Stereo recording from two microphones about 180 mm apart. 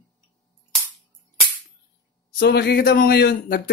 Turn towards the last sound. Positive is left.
turn(degrees=60)  # may be behind; listen again after turning